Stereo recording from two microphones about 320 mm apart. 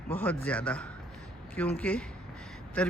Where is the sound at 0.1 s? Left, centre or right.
Centre.